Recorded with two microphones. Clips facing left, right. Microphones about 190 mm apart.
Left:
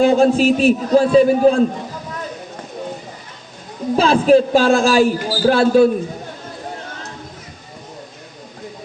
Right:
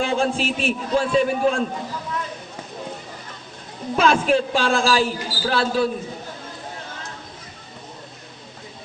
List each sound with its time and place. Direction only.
0.0 s a man's voice: 40° left (ahead or behind)
3.9 s a man's voice: 35° left (ahead or behind)